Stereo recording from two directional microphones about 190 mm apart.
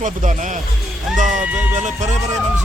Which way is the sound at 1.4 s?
5° right (ahead or behind).